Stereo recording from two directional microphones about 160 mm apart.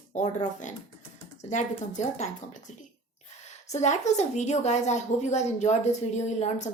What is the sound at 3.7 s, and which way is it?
A woman's voice, 45° left (ahead or behind).